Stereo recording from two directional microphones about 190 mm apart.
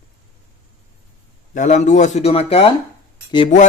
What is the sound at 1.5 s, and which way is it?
Mantra, 40° left (ahead or behind).